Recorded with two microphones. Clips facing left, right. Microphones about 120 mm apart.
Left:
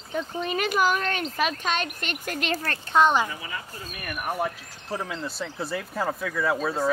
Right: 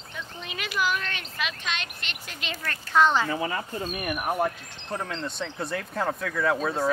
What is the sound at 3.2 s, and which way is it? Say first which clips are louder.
Speech: right 7 dB; 45° right (ahead or behind).